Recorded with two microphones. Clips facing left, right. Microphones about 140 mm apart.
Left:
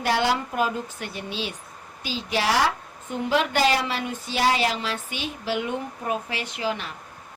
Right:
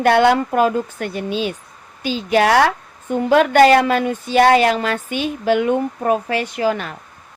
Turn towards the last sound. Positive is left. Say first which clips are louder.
# right 9 dB
turn(degrees=-50)  # may be behind; listen again after turning